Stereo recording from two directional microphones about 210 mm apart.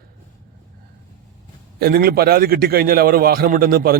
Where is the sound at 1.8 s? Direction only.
45° right (ahead or behind).